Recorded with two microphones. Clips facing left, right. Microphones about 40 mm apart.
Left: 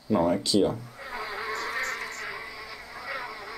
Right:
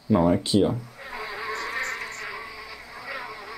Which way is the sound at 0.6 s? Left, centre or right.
Centre.